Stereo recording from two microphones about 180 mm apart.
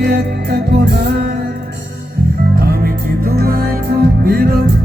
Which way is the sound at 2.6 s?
60° right (ahead or behind).